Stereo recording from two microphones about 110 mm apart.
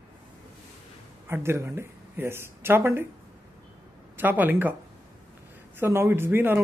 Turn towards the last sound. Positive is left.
turn(degrees=-20)  # may be behind; listen again after turning